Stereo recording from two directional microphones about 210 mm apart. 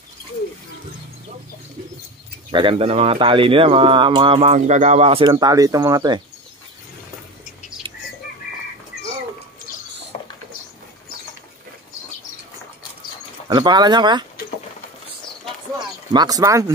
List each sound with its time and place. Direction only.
2.5 s speech: 25° right (ahead or behind)
10.1 s a sound: 30° left (ahead or behind)
13.5 s speech: 20° right (ahead or behind)
16.1 s speech: 20° right (ahead or behind)